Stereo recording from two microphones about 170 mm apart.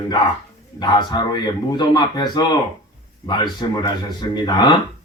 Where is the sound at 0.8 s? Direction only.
25° left (ahead or behind).